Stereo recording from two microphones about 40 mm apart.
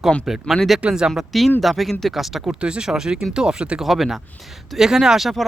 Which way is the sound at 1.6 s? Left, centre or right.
Centre.